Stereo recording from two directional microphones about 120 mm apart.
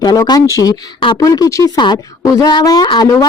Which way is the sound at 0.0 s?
35° left (ahead or behind).